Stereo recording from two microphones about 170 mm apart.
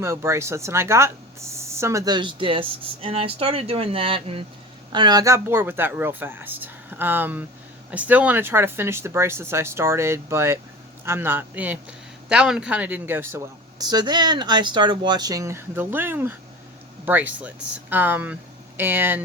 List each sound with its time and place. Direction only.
0.0 s speech: 15° right (ahead or behind)